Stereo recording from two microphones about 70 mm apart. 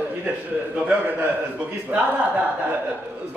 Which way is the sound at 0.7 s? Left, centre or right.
Right.